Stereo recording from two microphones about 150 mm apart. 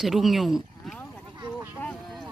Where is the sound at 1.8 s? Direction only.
5° left (ahead or behind).